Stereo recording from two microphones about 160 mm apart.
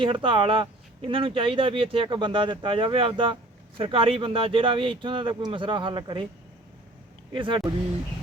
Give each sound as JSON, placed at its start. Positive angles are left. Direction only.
{"t": 0.0, "sound": "speech", "side_deg": -30}
{"t": 7.3, "sound": "speech", "side_deg": -30}